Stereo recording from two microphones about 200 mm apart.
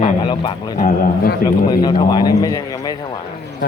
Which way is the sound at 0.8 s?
45° left (ahead or behind).